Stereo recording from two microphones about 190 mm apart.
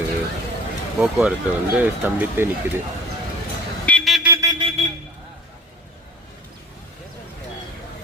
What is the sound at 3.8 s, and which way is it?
Vehicle, 5° left (ahead or behind).